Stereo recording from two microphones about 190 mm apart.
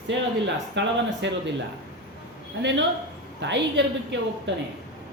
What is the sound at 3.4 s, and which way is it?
Speech, 70° right (ahead or behind).